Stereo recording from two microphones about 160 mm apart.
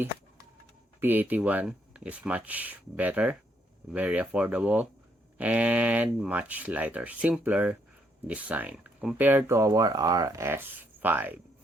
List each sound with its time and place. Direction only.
0.9 s speech: 10° right (ahead or behind)